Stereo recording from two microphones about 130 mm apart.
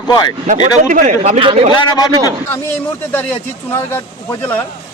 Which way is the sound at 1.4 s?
45° right (ahead or behind).